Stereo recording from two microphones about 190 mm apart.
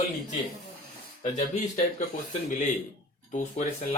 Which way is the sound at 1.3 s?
40° left (ahead or behind).